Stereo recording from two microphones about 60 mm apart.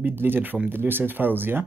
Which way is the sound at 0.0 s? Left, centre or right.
Right.